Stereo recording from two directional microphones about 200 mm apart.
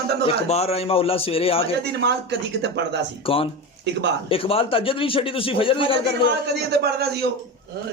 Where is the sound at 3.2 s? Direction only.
25° left (ahead or behind).